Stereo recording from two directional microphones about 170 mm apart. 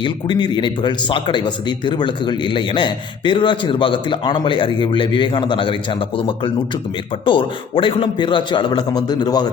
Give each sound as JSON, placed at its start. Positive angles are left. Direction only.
{"t": 0.0, "sound": "speech", "side_deg": 25}
{"t": 7.3, "sound": "speech", "side_deg": 30}